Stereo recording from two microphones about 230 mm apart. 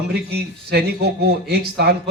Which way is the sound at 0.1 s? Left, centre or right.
Right.